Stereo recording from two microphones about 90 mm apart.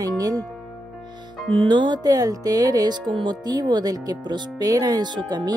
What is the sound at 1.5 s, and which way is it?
Speech, 70° right (ahead or behind).